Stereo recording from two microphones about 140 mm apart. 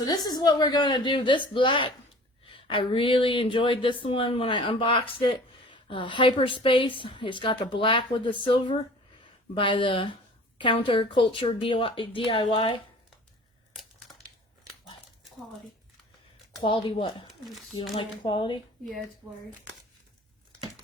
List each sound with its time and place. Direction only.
0.0 s speech: 30° left (ahead or behind)
16.6 s speech: 35° left (ahead or behind)